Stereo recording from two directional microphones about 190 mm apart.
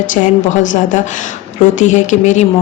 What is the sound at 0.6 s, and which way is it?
A woman's voice, 40° left (ahead or behind).